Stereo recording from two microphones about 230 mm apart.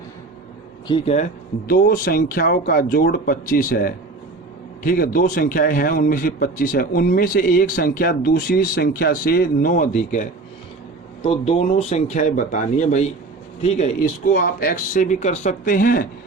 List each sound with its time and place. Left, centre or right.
0.9 s speech: left
1.6 s a man's voice: left